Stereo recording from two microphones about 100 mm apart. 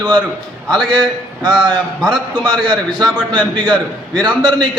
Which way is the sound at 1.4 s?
45° right (ahead or behind).